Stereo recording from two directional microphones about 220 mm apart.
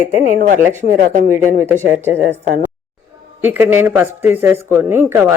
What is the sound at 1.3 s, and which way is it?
Speech, 10° right (ahead or behind).